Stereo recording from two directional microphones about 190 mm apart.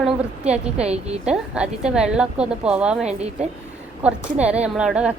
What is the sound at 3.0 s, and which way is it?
Speech, 35° right (ahead or behind).